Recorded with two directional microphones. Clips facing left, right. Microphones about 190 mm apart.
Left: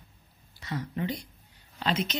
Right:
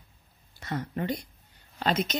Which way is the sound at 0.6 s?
50° right (ahead or behind).